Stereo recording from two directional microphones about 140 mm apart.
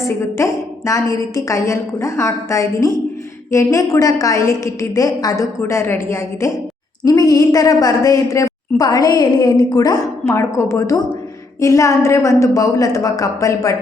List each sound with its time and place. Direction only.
0.0 s a woman's voice: 20° left (ahead or behind)